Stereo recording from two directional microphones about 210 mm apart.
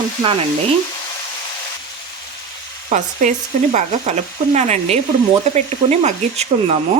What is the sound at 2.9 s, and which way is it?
Speech, 35° right (ahead or behind).